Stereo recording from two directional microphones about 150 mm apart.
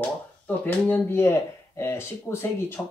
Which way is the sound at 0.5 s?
10° left (ahead or behind).